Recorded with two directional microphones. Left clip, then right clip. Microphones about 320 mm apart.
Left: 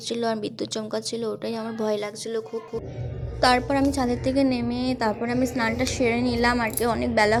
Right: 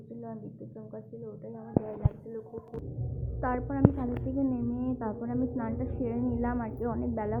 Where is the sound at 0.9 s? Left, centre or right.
Left.